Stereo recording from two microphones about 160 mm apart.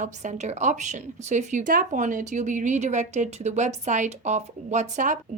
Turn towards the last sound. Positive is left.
turn(degrees=-50)  # may be behind; listen again after turning